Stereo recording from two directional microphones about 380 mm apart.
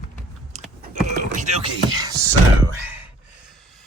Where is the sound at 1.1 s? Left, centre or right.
Centre.